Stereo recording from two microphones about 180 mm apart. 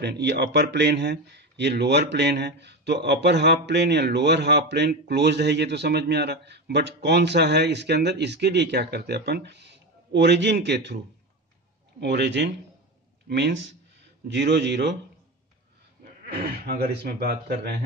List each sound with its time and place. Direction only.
0.0 s speech: 65° right (ahead or behind)
12.0 s speech: 70° right (ahead or behind)
16.3 s speech: 60° right (ahead or behind)